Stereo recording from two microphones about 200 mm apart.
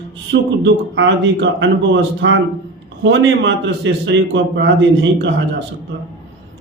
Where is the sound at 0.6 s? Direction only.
65° right (ahead or behind).